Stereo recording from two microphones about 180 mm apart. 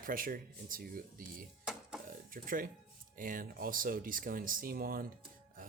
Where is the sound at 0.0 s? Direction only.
50° right (ahead or behind).